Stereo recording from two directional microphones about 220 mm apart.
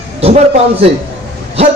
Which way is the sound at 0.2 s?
30° right (ahead or behind).